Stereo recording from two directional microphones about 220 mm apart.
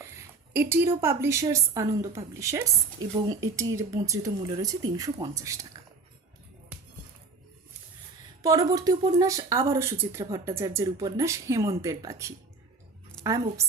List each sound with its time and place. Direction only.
0.5 s speech: 10° right (ahead or behind)
8.4 s speech: 15° right (ahead or behind)
13.2 s a sound: centre (ahead or behind)